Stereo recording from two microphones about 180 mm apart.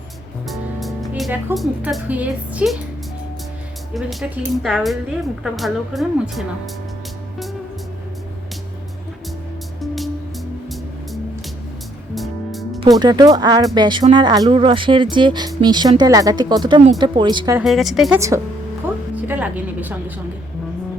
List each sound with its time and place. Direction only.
0.4 s music: centre (ahead or behind)
1.5 s speech: 5° right (ahead or behind)
3.9 s a woman's voice: centre (ahead or behind)
9.8 s music: centre (ahead or behind)
12.1 s music: centre (ahead or behind)
13.0 s speech: 25° right (ahead or behind)
17.6 s a woman's voice: centre (ahead or behind)
19.3 s speech: 10° right (ahead or behind)